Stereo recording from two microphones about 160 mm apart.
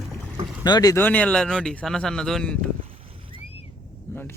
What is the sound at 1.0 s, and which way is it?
Speech, 10° left (ahead or behind).